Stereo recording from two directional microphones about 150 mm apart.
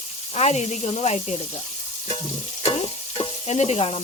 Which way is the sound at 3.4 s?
50° left (ahead or behind).